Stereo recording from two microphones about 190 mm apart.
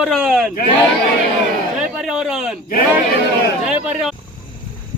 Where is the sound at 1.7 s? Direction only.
5° right (ahead or behind).